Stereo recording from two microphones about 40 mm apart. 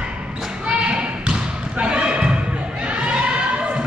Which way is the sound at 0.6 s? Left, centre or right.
Right.